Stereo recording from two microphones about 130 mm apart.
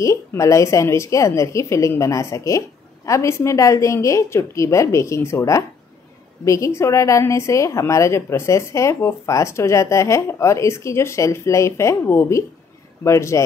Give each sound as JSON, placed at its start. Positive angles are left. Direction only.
{"t": 0.0, "sound": "a woman's voice", "side_deg": 25}